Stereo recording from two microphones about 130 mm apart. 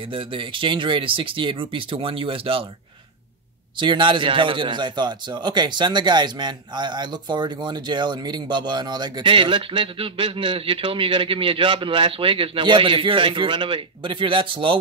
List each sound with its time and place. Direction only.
0.1 s speech: 40° right (ahead or behind)
3.7 s speech: 35° right (ahead or behind)